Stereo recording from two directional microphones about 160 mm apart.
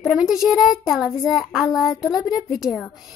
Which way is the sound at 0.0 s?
5° right (ahead or behind).